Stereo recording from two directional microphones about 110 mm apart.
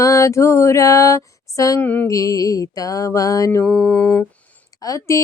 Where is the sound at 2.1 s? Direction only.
30° left (ahead or behind).